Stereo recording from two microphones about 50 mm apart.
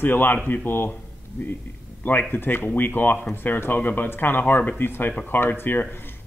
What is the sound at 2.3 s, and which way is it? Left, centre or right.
Speech, left.